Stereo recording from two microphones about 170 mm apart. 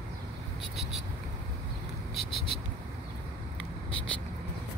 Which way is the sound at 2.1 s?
Centre (ahead or behind).